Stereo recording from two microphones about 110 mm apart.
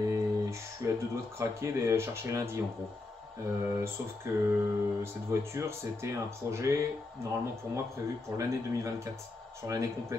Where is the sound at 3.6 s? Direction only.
20° right (ahead or behind).